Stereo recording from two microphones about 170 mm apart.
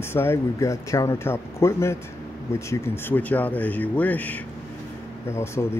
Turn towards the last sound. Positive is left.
turn(degrees=15)  # may be behind; listen again after turning